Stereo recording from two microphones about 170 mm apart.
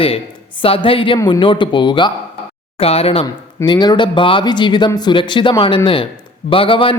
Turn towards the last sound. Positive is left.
turn(degrees=30)  # may be behind; listen again after turning